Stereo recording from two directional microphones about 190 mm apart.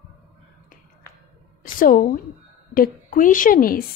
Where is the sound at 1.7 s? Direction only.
45° left (ahead or behind).